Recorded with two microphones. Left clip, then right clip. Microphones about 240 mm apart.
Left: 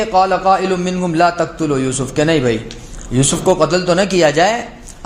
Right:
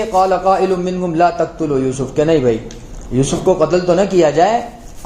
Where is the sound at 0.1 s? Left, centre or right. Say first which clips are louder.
Even; left.